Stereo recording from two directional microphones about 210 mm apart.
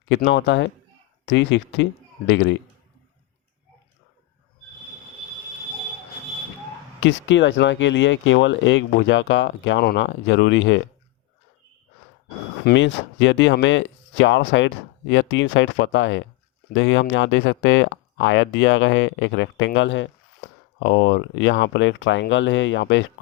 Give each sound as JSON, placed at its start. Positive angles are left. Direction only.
{"t": 0.3, "sound": "speech", "side_deg": 60}
{"t": 7.0, "sound": "speech", "side_deg": 60}
{"t": 12.6, "sound": "speech", "side_deg": 60}